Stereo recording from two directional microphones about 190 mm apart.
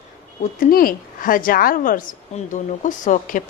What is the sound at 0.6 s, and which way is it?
Speech, 50° left (ahead or behind).